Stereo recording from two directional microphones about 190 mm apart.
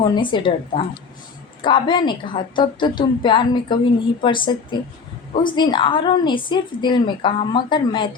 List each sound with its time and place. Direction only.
0.0 s a woman's voice: 25° left (ahead or behind)